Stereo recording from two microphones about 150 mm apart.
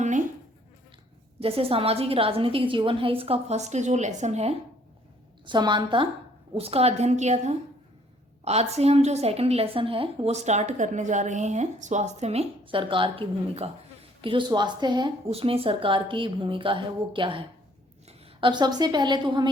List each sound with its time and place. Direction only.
1.4 s a woman's voice: 40° right (ahead or behind)
5.5 s a woman's voice: 30° right (ahead or behind)